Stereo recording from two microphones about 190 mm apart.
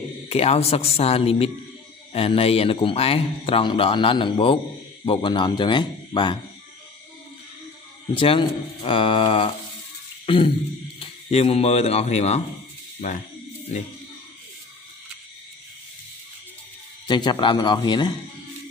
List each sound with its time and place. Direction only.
0.3 s a man's voice: 30° left (ahead or behind)
8.1 s a man's voice: 25° left (ahead or behind)
10.2 s a sound: 25° left (ahead or behind)
11.0 s speech: 30° left (ahead or behind)
17.1 s a man's voice: 25° left (ahead or behind)